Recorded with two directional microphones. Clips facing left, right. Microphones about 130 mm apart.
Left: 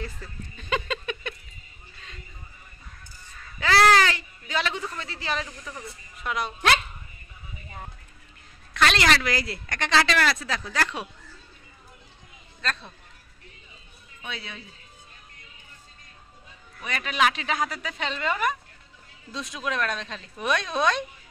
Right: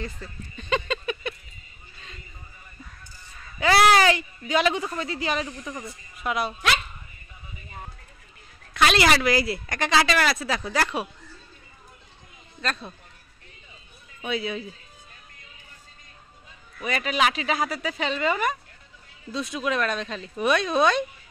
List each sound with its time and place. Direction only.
0.0 s a sound: 5° left (ahead or behind)
3.5 s speech: 15° right (ahead or behind)
8.7 s speech: 10° right (ahead or behind)
12.6 s speech: 15° right (ahead or behind)
14.2 s speech: 10° right (ahead or behind)
16.8 s a woman's voice: 5° right (ahead or behind)